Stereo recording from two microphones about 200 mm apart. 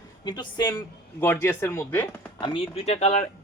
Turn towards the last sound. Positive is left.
turn(degrees=35)  # may be behind; listen again after turning